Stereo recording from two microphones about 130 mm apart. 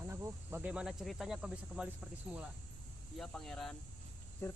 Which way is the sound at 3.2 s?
5° left (ahead or behind).